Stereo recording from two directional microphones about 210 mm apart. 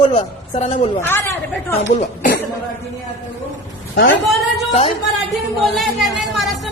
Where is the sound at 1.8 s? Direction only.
35° left (ahead or behind).